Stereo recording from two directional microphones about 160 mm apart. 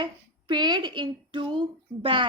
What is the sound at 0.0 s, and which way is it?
Speech, 30° right (ahead or behind).